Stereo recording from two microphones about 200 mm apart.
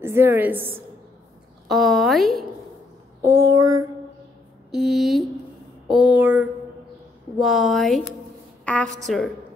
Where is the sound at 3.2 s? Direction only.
15° right (ahead or behind).